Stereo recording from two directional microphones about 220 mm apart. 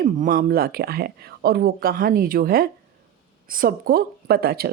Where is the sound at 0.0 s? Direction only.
40° right (ahead or behind).